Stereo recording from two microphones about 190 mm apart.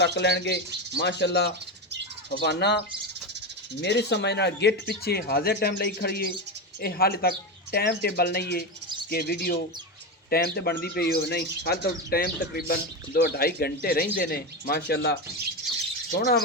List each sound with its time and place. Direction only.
0.0 s speech: 65° left (ahead or behind)
3.8 s speech: 65° left (ahead or behind)